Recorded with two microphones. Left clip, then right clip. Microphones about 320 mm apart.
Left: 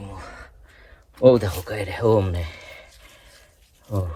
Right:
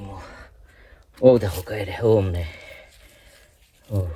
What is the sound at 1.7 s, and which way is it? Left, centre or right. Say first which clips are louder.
Speech: even; centre.